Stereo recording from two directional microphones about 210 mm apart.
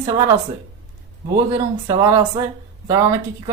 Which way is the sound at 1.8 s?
20° right (ahead or behind).